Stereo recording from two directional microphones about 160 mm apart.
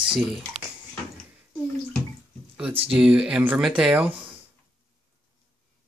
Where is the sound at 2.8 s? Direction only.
5° right (ahead or behind).